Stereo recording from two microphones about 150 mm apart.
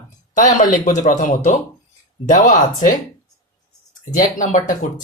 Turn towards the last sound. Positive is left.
turn(degrees=60)  # may be behind; listen again after turning